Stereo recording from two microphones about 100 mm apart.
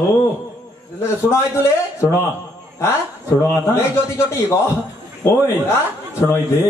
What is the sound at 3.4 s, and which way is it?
A man's voice, 25° left (ahead or behind).